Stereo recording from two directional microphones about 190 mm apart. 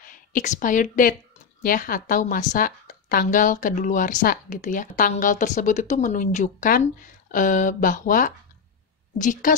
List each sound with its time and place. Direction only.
0.0 s a woman's voice: 45° left (ahead or behind)